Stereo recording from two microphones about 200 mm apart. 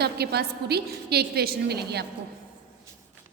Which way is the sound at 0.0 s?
55° right (ahead or behind).